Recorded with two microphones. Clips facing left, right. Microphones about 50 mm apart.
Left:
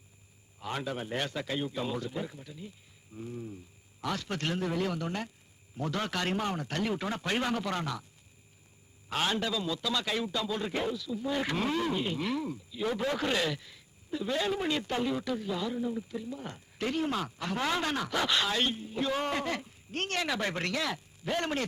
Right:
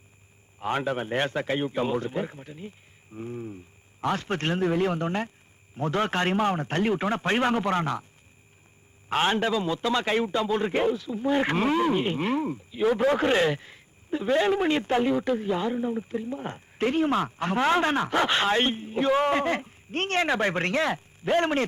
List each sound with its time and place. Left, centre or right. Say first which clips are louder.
0.6 s speech: right 8 dB; right
9.0 s speech: right 7 dB; right